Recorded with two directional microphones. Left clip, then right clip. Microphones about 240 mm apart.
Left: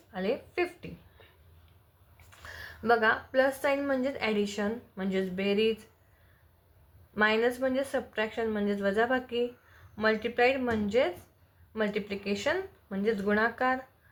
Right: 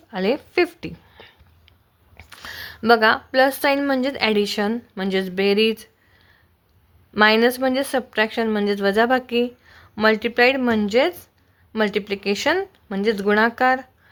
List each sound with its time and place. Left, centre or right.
0.1 s speech: right
2.3 s speech: right
7.1 s speech: right